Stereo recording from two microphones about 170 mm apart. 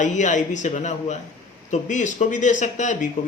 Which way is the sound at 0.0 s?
45° left (ahead or behind).